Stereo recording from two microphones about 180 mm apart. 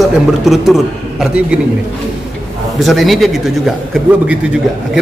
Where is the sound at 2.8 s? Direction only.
Centre (ahead or behind).